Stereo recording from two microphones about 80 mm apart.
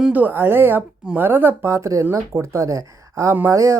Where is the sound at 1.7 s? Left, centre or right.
Right.